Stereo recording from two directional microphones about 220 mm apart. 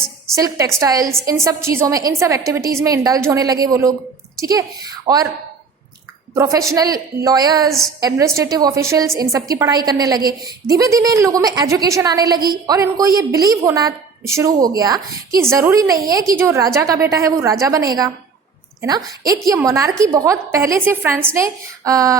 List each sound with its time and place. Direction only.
0.3 s a woman's voice: 15° right (ahead or behind)
6.3 s a woman's voice: 15° right (ahead or behind)
7.7 s a woman's voice: centre (ahead or behind)
8.0 s a woman's voice: 15° right (ahead or behind)